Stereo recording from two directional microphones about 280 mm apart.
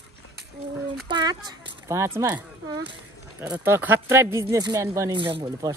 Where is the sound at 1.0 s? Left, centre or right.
Centre.